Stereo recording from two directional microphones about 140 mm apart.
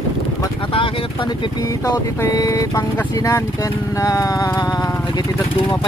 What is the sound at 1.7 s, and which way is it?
Speech, 25° left (ahead or behind).